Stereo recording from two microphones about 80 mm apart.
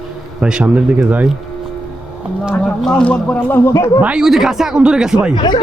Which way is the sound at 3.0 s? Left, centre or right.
Centre.